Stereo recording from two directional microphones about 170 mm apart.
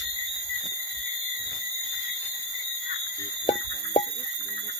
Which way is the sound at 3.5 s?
25° left (ahead or behind).